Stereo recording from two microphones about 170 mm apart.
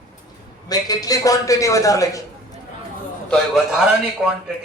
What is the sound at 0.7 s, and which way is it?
A man's voice, 20° left (ahead or behind).